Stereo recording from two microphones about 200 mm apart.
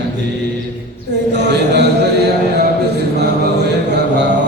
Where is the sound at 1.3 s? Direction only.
60° right (ahead or behind).